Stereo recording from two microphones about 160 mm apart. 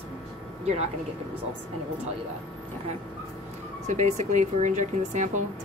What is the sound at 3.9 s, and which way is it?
Speech, 45° right (ahead or behind).